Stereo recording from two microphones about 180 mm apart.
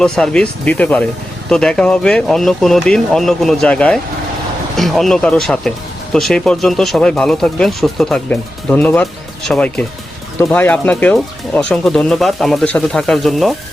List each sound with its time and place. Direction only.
0.0 s speech: 5° left (ahead or behind)